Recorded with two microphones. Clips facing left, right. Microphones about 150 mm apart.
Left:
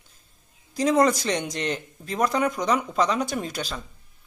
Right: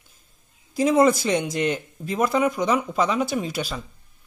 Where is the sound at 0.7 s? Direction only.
5° right (ahead or behind).